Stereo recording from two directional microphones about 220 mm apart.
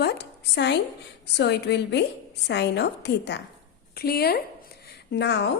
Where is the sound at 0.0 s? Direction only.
50° left (ahead or behind).